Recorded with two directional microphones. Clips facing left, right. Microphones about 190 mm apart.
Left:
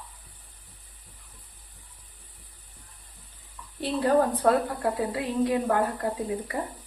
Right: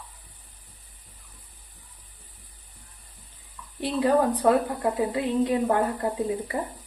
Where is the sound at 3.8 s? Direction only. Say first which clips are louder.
Right 1 dB; 15° right (ahead or behind).